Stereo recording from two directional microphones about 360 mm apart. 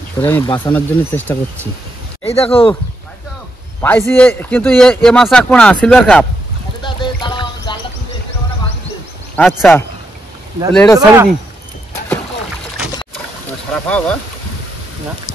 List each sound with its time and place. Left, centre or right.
0.2 s speech: centre
2.2 s speech: centre
3.8 s speech: centre
6.8 s clip-clop: centre
9.4 s speech: centre
13.8 s speech: centre